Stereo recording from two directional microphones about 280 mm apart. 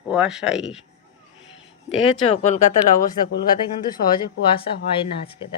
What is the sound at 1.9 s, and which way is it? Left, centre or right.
Speech, left.